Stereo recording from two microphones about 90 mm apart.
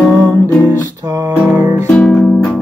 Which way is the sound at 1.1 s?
40° right (ahead or behind).